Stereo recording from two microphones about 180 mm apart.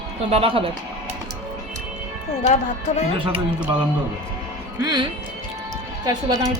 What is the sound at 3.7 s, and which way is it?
Speech, 30° right (ahead or behind).